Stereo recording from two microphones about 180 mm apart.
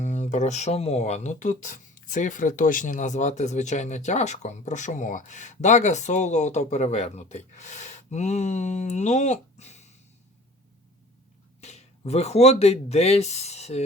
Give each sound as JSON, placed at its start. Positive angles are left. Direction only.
{"t": 0.0, "sound": "speech", "side_deg": 40}
{"t": 11.6, "sound": "speech", "side_deg": 40}